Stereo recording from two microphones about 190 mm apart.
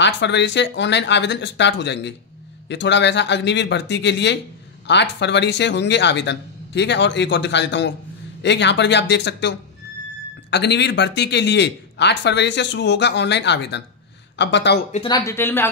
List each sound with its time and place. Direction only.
0.0 s speech: 65° left (ahead or behind)
15.0 s speech: 20° left (ahead or behind)